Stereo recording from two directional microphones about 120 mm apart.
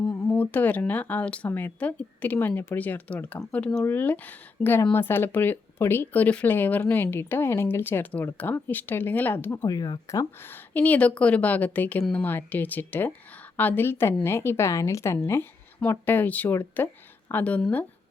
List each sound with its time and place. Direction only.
0.0 s a sound: 35° left (ahead or behind)
0.3 s speech: 15° left (ahead or behind)
9.6 s a woman's voice: 35° left (ahead or behind); by 17.8 s 10° left (ahead or behind)